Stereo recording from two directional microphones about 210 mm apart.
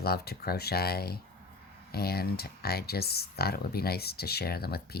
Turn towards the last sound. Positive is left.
turn(degrees=50)  # may be behind; listen again after turning